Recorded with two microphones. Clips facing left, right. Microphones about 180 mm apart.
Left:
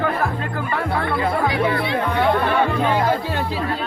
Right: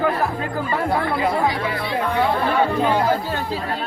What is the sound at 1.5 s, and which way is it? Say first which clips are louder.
Speech: left 3 dB; 60° left (ahead or behind).